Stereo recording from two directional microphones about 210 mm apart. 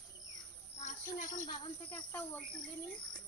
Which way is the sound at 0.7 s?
35° left (ahead or behind).